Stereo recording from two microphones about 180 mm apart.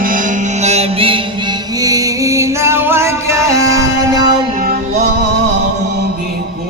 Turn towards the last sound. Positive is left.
turn(degrees=-60)  # may be behind; listen again after turning